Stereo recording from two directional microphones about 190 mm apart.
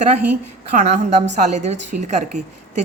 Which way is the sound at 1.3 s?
35° right (ahead or behind).